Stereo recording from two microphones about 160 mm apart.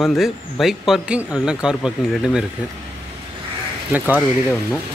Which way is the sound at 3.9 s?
10° right (ahead or behind).